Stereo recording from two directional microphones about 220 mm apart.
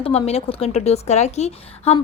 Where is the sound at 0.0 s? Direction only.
25° left (ahead or behind).